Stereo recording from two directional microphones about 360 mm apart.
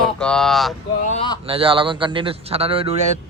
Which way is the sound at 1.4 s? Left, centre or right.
Centre.